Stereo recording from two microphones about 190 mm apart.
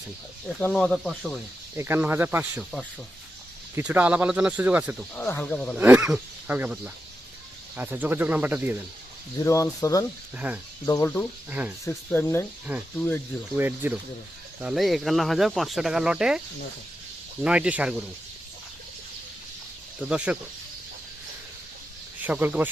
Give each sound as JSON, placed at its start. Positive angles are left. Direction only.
{"t": 0.7, "sound": "speech", "side_deg": 0}
{"t": 3.8, "sound": "speech", "side_deg": -10}
{"t": 5.1, "sound": "speech", "side_deg": 10}
{"t": 5.7, "sound": "speech", "side_deg": -5}
{"t": 9.4, "sound": "speech", "side_deg": 15}
{"t": 10.3, "sound": "speech", "side_deg": -5}
{"t": 10.8, "sound": "speech", "side_deg": 15}
{"t": 13.6, "sound": "speech", "side_deg": -10}
{"t": 17.4, "sound": "speech", "side_deg": -5}
{"t": 20.1, "sound": "speech", "side_deg": -5}
{"t": 22.2, "sound": "speech", "side_deg": -10}